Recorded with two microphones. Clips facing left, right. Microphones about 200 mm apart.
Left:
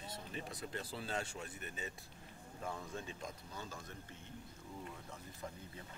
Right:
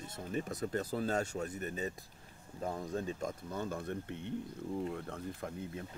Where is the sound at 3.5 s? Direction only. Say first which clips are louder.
Right 11 dB; 55° right (ahead or behind).